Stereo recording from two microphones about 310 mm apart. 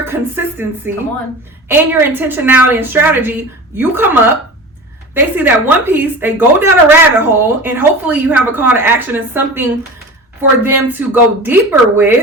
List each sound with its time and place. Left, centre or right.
0.0 s a woman's voice: centre